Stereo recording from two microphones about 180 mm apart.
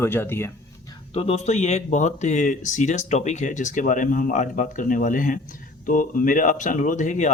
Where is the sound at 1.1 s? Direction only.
35° left (ahead or behind).